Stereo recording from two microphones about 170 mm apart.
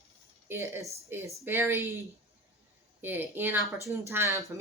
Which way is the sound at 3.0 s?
10° right (ahead or behind).